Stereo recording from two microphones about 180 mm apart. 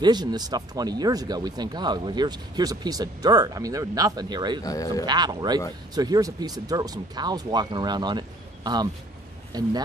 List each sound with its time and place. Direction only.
0.0 s speech: 25° right (ahead or behind)
4.6 s speech: 20° left (ahead or behind)
5.0 s speech: 25° right (ahead or behind)